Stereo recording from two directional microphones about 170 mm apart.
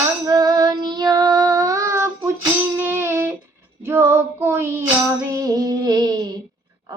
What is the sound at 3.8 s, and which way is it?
Female singing, 15° right (ahead or behind).